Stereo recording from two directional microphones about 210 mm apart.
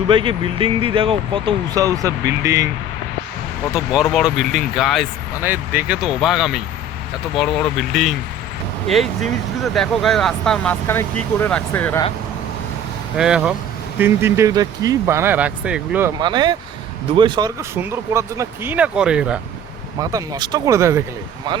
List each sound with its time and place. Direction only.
0.1 s speech: 25° right (ahead or behind)
3.8 s speech: centre (ahead or behind)
9.7 s speech: centre (ahead or behind)
13.1 s speech: 5° right (ahead or behind)
16.2 s speech: 20° right (ahead or behind); by 19.4 s 5° right (ahead or behind)
20.0 s speech: 20° right (ahead or behind)